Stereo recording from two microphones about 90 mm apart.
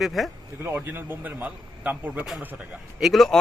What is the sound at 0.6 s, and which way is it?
A man's voice, 25° right (ahead or behind).